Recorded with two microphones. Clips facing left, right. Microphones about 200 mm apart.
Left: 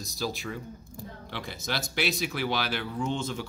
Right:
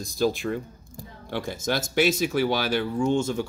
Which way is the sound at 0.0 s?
50° right (ahead or behind).